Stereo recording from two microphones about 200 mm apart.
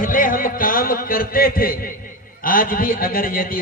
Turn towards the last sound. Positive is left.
turn(degrees=45)  # may be behind; listen again after turning